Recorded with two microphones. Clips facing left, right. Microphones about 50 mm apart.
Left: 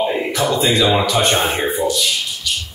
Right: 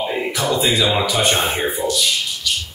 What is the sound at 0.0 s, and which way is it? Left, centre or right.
Speech, centre.